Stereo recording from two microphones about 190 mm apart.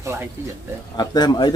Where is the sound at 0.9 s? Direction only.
20° left (ahead or behind).